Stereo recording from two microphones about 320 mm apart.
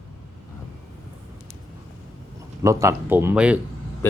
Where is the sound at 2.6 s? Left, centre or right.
Centre.